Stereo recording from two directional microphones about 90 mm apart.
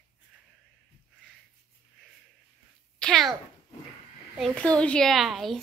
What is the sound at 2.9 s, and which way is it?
Babbling, 5° left (ahead or behind).